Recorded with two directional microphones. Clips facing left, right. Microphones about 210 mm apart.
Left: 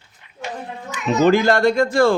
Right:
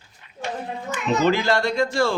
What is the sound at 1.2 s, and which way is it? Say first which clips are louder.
Speech: left 7 dB; 50° left (ahead or behind).